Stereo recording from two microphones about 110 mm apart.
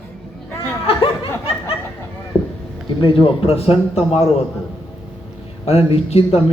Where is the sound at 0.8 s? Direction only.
55° left (ahead or behind).